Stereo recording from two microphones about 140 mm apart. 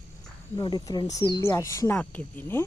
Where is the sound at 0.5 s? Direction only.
25° left (ahead or behind).